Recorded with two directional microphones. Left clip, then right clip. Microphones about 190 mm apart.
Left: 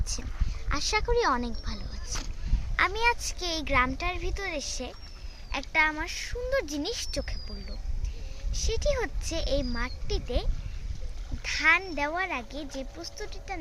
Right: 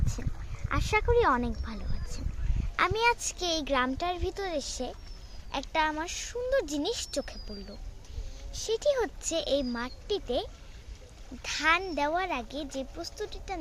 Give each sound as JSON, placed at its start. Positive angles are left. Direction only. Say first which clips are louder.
{"t": 0.7, "sound": "speech", "louder": "right 1 dB", "side_deg": -25}
{"t": 2.7, "sound": "a child's voice", "louder": "even", "side_deg": -35}
{"t": 8.5, "sound": "a child's voice", "louder": "right 2 dB", "side_deg": -35}